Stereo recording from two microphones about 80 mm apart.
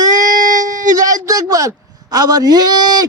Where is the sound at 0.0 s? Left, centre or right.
Right.